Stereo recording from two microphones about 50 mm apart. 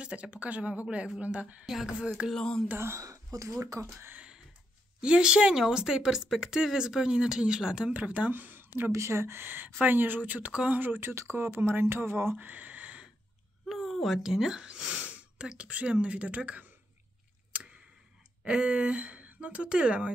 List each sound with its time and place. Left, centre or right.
0.0 s speech: right
2.3 s speech: centre
2.8 s speech: right
5.0 s speech: centre
7.9 s speech: right
8.9 s speech: right
11.0 s speech: right
12.4 s a sound: right
13.7 s a sound: centre
15.0 s a sound: right
15.5 s speech: right
17.5 s a sound: right
18.4 s speech: centre